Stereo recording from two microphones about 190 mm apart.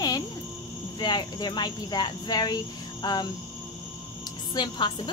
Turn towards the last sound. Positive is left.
turn(degrees=25)  # may be behind; listen again after turning